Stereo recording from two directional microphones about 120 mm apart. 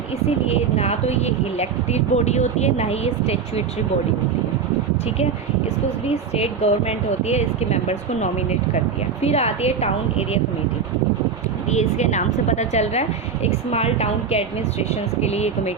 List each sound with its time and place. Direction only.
0.4 s a woman's voice: 60° left (ahead or behind)
6.3 s a woman's voice: 60° left (ahead or behind)
11.7 s a woman's voice: 70° left (ahead or behind)